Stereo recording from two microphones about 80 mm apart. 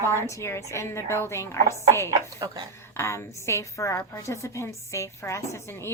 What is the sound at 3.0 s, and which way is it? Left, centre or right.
A woman's voice, left.